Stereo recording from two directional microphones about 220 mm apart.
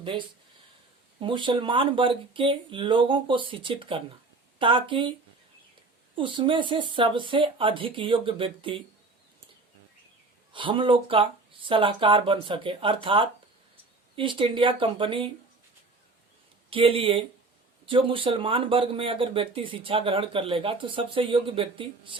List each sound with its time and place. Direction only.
1.2 s speech: 20° right (ahead or behind)
6.1 s speech: 20° right (ahead or behind)
10.5 s speech: 25° right (ahead or behind)
16.6 s speech: 25° right (ahead or behind)